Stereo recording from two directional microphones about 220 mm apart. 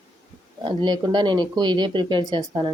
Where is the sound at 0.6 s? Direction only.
20° right (ahead or behind).